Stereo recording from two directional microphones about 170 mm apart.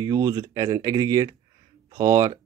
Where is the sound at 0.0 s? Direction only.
20° right (ahead or behind).